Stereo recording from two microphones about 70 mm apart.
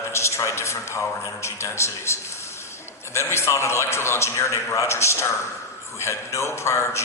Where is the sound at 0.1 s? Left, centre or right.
Left.